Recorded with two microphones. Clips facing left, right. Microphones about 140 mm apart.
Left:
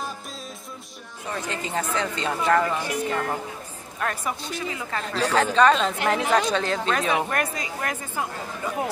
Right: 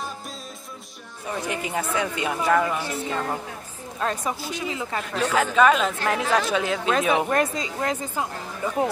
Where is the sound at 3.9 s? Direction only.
20° right (ahead or behind).